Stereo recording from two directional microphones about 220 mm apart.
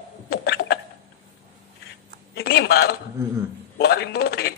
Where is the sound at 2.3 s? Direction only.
45° left (ahead or behind).